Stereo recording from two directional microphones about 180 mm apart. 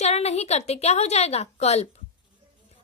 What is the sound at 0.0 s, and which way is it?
A woman's voice, 35° left (ahead or behind).